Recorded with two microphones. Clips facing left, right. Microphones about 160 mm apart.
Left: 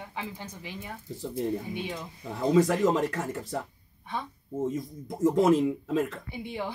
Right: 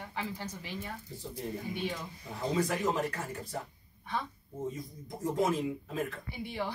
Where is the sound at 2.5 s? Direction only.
90° left.